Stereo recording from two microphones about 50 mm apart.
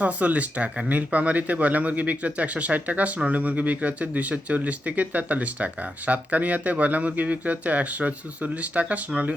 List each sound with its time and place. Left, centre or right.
0.0 s speech: right